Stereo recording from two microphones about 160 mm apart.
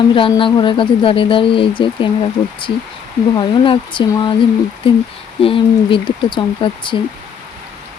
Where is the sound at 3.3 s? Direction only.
30° left (ahead or behind).